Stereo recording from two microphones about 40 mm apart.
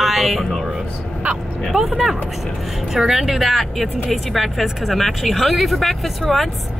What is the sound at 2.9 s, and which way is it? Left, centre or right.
A woman's voice, centre.